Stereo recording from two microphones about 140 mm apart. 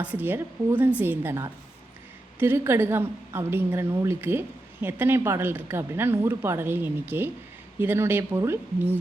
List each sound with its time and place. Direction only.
0.0 s a woman's voice: 10° right (ahead or behind)